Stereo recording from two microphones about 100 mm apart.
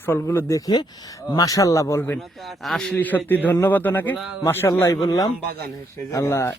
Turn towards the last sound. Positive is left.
turn(degrees=25)  # may be behind; listen again after turning